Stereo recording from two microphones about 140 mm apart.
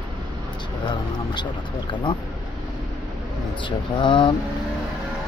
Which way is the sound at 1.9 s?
35° left (ahead or behind).